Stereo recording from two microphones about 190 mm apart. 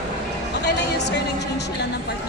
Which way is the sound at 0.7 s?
65° left (ahead or behind).